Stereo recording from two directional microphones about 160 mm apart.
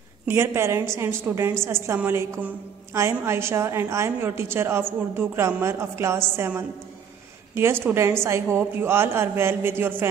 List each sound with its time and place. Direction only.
0.3 s a woman's voice: 15° right (ahead or behind)